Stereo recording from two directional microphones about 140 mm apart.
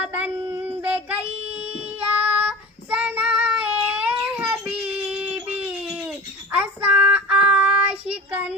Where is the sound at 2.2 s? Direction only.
10° right (ahead or behind).